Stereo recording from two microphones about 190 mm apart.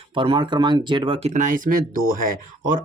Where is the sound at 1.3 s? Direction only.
45° right (ahead or behind).